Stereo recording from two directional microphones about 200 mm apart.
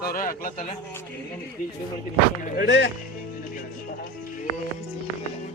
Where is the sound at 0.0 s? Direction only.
45° left (ahead or behind).